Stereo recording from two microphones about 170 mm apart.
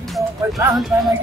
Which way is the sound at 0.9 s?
10° right (ahead or behind).